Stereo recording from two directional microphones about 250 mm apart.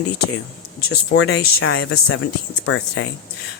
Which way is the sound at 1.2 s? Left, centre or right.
Left.